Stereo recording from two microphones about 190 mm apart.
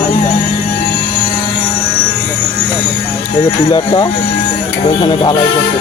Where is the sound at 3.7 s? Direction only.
25° left (ahead or behind).